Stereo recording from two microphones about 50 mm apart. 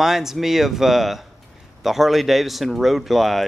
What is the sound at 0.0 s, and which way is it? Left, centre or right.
Speech, centre.